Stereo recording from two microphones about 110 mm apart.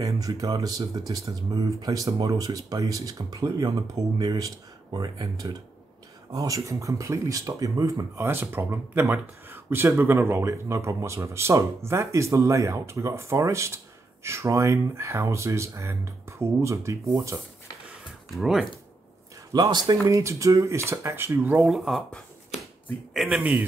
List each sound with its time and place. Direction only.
0.0 s speech: 30° right (ahead or behind)
17.8 s a sound: centre (ahead or behind)
19.5 s speech: 40° right (ahead or behind)
20.1 s speech: 30° right (ahead or behind)
21.6 s speech: centre (ahead or behind)